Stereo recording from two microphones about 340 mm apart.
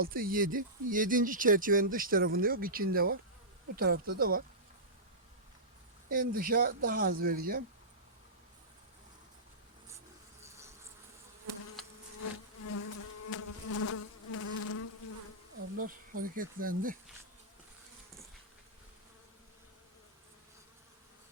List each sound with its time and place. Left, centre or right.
0.0 s speech: right
6.1 s speech: right
11.8 s insect: centre
12.7 s bee: left
15.8 s speech: right